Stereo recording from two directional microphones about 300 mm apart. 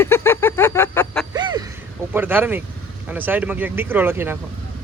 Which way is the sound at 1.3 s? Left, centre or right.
Centre.